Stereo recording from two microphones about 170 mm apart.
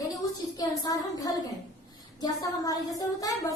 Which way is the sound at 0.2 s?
20° left (ahead or behind).